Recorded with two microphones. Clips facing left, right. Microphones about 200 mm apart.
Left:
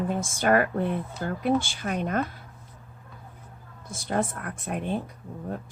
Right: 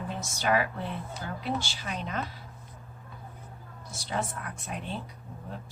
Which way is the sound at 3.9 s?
50° left (ahead or behind).